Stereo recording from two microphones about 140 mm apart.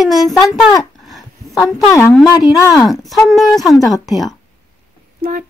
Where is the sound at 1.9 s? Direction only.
20° left (ahead or behind).